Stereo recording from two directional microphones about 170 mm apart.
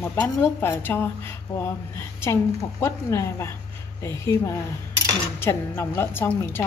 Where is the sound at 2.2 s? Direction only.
15° left (ahead or behind).